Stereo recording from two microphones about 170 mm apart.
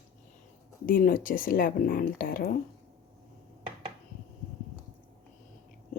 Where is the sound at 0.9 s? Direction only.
55° left (ahead or behind).